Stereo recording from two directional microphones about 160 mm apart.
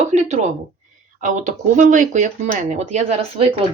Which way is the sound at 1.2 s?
50° right (ahead or behind).